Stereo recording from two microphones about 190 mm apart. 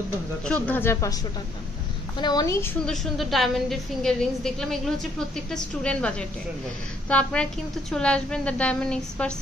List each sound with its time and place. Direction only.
0.5 s speech: 10° left (ahead or behind)
2.1 s a woman's voice: 20° left (ahead or behind)
2.9 s a woman's voice: centre (ahead or behind)